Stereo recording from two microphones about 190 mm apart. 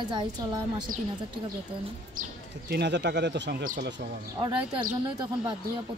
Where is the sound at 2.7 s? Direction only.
65° right (ahead or behind).